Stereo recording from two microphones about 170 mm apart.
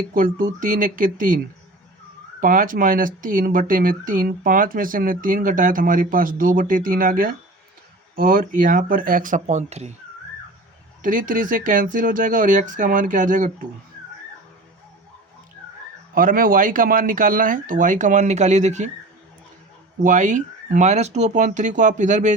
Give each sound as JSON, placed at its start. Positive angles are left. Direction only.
{"t": 0.1, "sound": "speech", "side_deg": -55}
{"t": 2.4, "sound": "speech", "side_deg": -55}
{"t": 11.0, "sound": "speech", "side_deg": -50}
{"t": 16.1, "sound": "speech", "side_deg": -55}
{"t": 20.0, "sound": "speech", "side_deg": -50}